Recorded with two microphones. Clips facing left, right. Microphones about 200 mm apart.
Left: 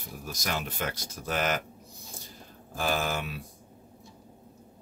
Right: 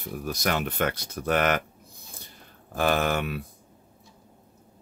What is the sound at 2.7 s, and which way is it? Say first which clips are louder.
Speech: right 5 dB; 65° right (ahead or behind).